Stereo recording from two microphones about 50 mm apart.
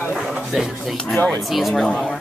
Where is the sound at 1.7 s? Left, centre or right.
Centre.